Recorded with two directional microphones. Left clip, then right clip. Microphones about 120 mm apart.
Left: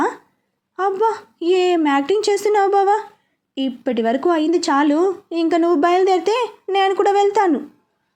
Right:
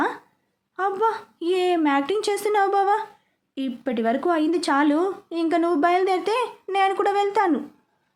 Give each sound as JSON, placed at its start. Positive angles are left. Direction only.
{"t": 0.8, "sound": "speech", "side_deg": 15}